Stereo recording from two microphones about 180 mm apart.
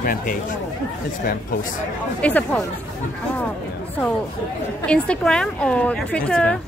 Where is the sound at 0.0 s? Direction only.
50° left (ahead or behind).